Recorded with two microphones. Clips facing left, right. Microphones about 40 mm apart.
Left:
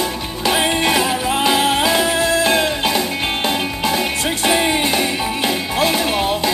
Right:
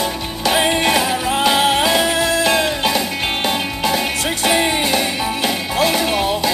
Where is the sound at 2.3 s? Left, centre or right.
Left.